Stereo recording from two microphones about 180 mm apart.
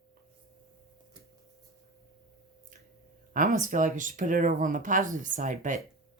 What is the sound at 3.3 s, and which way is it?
Speech, 45° right (ahead or behind).